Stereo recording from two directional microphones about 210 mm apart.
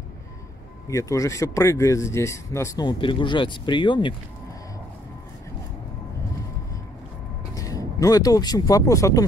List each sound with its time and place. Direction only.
0.8 s speech: 15° left (ahead or behind)
7.5 s speech: 15° left (ahead or behind)